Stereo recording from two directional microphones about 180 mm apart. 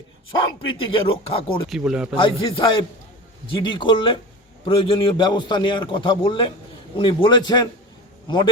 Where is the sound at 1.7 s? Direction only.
5° right (ahead or behind).